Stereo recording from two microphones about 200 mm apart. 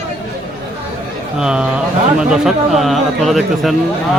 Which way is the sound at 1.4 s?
5° right (ahead or behind).